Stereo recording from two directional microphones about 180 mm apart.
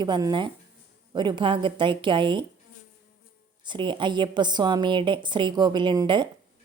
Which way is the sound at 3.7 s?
25° right (ahead or behind).